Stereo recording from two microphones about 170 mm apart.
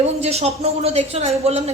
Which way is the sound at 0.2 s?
40° right (ahead or behind).